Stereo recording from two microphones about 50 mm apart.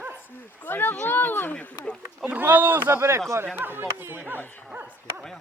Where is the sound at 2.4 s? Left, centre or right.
Right.